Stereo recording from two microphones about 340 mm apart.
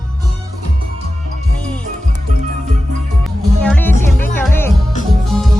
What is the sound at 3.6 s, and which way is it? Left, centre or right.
Music, centre.